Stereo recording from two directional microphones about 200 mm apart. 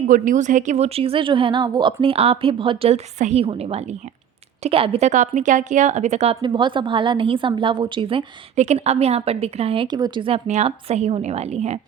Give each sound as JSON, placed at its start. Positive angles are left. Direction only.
{"t": 0.1, "sound": "a woman's voice", "side_deg": -40}